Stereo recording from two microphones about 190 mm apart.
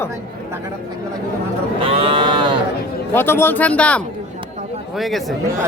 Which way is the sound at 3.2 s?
10° left (ahead or behind).